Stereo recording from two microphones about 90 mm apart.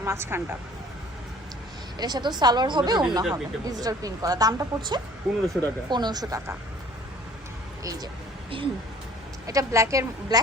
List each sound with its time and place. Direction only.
0.0 s speech: 30° right (ahead or behind)
2.0 s speech: 50° right (ahead or behind)
3.3 s speech: 45° right (ahead or behind)
5.2 s speech: centre (ahead or behind)
5.9 s speech: 50° right (ahead or behind)
9.5 s a woman's voice: 35° right (ahead or behind)
10.3 s speech: 45° right (ahead or behind)